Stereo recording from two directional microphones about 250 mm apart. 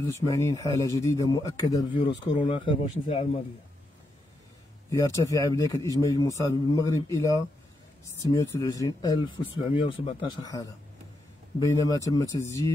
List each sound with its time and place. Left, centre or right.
0.3 s speech: centre
4.8 s speech: centre